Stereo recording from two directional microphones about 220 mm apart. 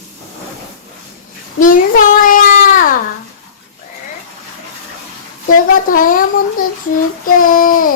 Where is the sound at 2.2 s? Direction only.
40° left (ahead or behind).